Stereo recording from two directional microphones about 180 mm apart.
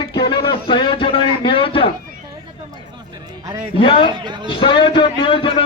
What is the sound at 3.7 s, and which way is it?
Music, 30° left (ahead or behind).